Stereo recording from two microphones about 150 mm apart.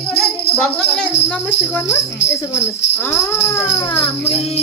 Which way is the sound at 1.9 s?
20° left (ahead or behind).